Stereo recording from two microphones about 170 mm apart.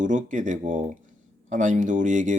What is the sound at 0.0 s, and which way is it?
Speech, 50° right (ahead or behind).